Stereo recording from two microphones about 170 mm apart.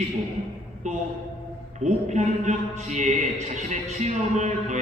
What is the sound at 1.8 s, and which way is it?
A man's voice, 45° right (ahead or behind).